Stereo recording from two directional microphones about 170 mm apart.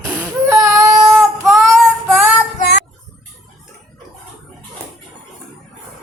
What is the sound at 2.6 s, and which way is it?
Child singing, 80° left.